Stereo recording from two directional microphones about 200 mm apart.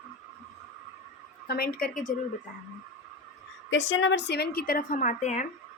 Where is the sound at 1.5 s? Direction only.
50° left (ahead or behind).